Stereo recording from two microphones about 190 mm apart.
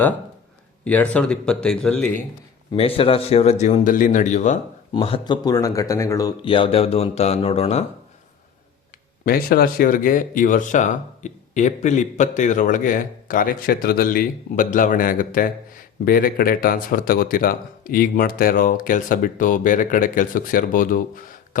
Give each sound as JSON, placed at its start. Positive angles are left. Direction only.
{"t": 0.9, "sound": "speech", "side_deg": 5}
{"t": 2.7, "sound": "speech", "side_deg": 30}
{"t": 9.2, "sound": "speech", "side_deg": 50}